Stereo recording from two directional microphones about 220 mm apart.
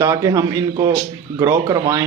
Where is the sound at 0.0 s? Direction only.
15° right (ahead or behind).